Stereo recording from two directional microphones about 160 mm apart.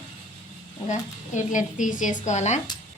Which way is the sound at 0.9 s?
50° left (ahead or behind).